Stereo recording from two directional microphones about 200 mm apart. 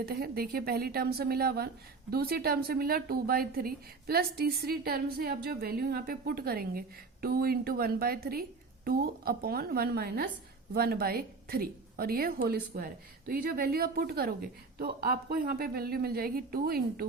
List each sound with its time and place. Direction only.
0.0 s a woman's voice: 50° right (ahead or behind)